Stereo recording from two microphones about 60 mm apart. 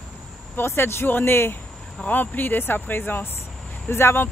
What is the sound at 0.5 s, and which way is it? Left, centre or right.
Speech, left.